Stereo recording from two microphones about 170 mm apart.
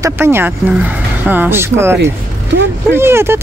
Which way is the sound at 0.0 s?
15° right (ahead or behind).